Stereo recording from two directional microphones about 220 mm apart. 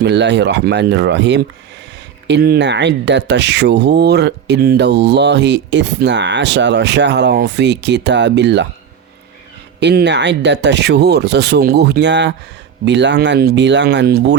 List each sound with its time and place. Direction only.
0.0 s speech: 50° right (ahead or behind)
9.8 s speech: 50° right (ahead or behind)